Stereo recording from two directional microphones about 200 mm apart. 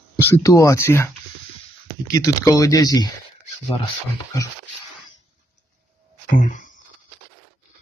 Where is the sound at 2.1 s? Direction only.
15° left (ahead or behind).